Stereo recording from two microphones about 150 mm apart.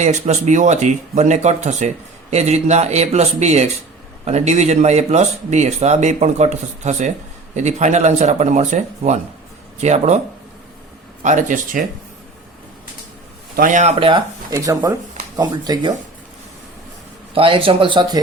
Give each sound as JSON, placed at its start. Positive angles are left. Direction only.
{"t": 0.0, "sound": "speech", "side_deg": -50}
{"t": 11.2, "sound": "speech", "side_deg": -55}
{"t": 13.6, "sound": "speech", "side_deg": -60}
{"t": 13.9, "sound": "speech", "side_deg": -35}
{"t": 14.5, "sound": "speech", "side_deg": -20}
{"t": 17.3, "sound": "speech", "side_deg": -35}